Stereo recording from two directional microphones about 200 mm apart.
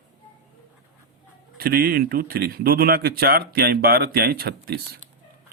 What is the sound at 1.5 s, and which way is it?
Speech, 50° right (ahead or behind).